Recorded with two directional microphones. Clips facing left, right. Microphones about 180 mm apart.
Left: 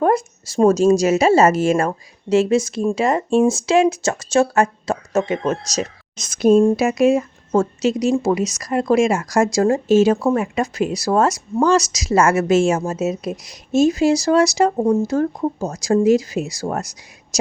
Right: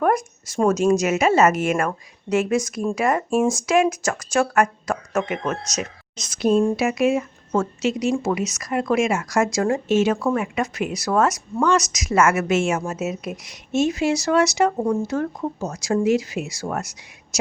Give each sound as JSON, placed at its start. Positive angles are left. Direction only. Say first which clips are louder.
{"t": 0.0, "sound": "speech", "louder": "left 3 dB", "side_deg": 30}
{"t": 6.1, "sound": "a woman's voice", "louder": "left 5 dB", "side_deg": 50}
{"t": 15.0, "sound": "a woman's voice", "louder": "left 5 dB", "side_deg": 35}